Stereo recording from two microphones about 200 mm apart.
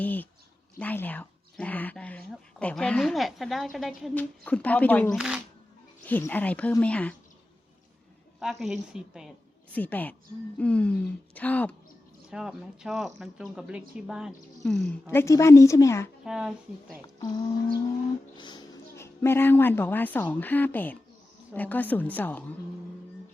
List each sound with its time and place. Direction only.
0.0 s speech: 10° left (ahead or behind)
5.1 s speech: 5° right (ahead or behind)
6.1 s speech: 10° left (ahead or behind)
8.4 s speech: centre (ahead or behind)
9.7 s speech: 10° left (ahead or behind)
12.3 s speech: 5° right (ahead or behind)
15.0 s speech: 10° left (ahead or behind)
16.2 s speech: 5° right (ahead or behind)
17.2 s speech: 20° left (ahead or behind)